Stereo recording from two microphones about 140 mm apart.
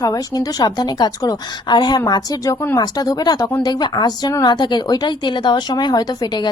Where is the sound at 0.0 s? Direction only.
30° left (ahead or behind).